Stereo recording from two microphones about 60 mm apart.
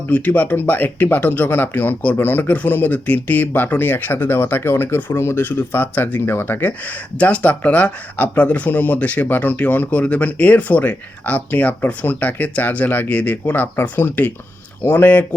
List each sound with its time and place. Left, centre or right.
0.1 s speech: left